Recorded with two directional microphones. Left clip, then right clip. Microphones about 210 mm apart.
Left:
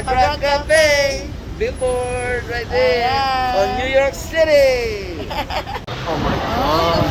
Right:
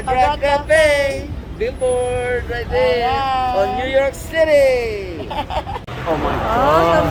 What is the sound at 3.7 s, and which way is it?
Speech, 20° right (ahead or behind).